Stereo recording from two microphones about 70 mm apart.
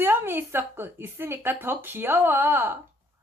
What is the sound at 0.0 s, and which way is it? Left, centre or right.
Speech, right.